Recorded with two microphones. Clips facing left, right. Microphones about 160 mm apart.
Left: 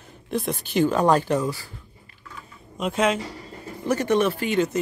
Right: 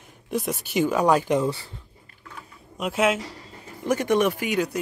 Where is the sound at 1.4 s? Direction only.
25° right (ahead or behind).